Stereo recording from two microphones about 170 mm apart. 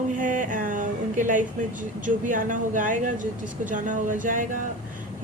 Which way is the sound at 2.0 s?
50° right (ahead or behind).